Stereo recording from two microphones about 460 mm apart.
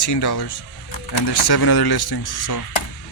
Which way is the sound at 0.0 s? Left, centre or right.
Left.